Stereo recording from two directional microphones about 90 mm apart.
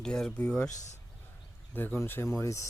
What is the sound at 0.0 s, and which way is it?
Speech, 10° left (ahead or behind).